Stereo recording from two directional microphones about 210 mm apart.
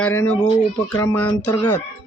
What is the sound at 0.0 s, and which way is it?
Speech, 10° left (ahead or behind).